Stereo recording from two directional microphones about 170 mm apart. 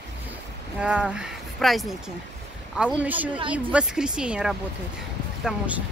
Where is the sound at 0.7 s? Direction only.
5° right (ahead or behind).